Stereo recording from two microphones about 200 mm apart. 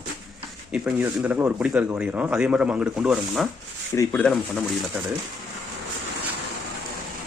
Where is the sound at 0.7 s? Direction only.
5° right (ahead or behind).